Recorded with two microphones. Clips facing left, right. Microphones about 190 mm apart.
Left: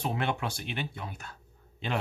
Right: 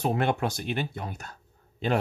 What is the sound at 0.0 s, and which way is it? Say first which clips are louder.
A man's voice: right 5 dB; 40° right (ahead or behind).